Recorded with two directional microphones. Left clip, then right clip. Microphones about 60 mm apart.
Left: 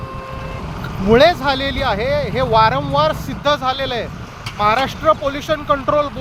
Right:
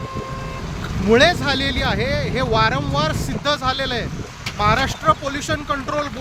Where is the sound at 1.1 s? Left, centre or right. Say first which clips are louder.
Left 3 dB; centre.